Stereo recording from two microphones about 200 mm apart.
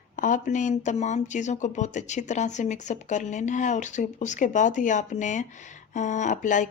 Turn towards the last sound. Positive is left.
turn(degrees=40)  # may be behind; listen again after turning